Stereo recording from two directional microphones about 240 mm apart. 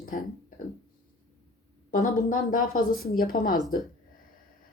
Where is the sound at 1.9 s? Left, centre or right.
Left.